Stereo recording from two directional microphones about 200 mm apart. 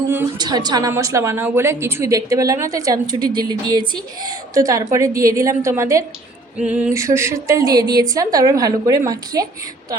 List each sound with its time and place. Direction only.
0.1 s a woman's voice: 15° right (ahead or behind)